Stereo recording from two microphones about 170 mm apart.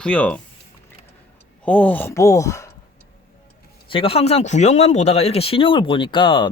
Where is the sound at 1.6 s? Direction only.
10° left (ahead or behind).